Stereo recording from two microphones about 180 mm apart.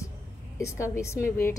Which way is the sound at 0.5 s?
15° left (ahead or behind).